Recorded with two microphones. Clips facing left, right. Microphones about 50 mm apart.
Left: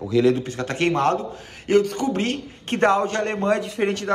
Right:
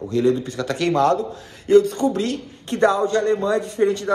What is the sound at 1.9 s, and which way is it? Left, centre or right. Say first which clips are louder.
A man's voice: right 2 dB; left.